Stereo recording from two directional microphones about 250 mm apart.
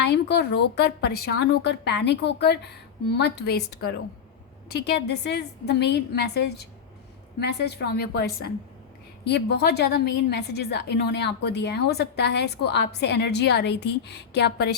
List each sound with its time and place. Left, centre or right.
0.0 s a woman's voice: left